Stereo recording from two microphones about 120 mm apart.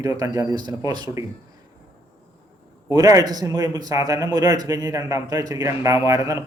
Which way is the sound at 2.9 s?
30° right (ahead or behind).